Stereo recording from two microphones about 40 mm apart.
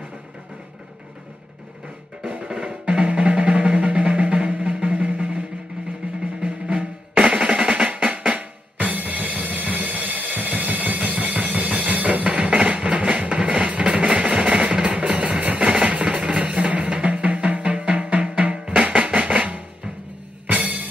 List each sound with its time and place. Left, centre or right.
3.0 s music: right
6.4 s drum: right
20.4 s music: right